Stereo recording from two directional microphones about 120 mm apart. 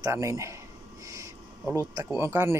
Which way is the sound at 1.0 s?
25° right (ahead or behind).